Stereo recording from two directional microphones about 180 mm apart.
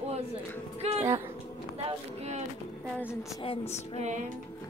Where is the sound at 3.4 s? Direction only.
35° left (ahead or behind).